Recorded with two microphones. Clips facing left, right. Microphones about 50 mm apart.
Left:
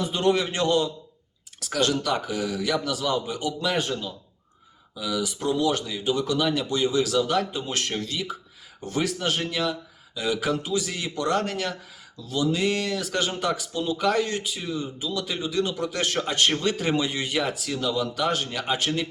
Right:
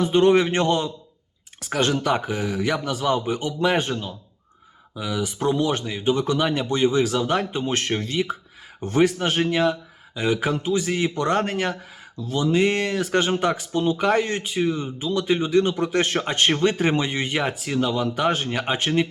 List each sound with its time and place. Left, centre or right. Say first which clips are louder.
0.0 s speech: right 6 dB; right